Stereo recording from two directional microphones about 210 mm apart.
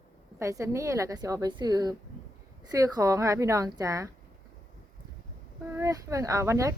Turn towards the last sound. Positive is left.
turn(degrees=-15)  # may be behind; listen again after turning